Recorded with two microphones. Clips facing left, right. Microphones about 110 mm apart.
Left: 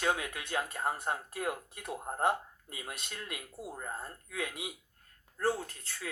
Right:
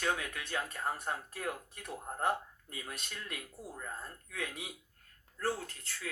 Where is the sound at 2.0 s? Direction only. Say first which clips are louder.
Left 3 dB; 30° left (ahead or behind).